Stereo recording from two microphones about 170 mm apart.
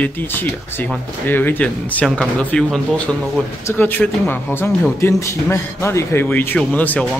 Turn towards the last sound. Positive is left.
turn(degrees=10)  # may be behind; listen again after turning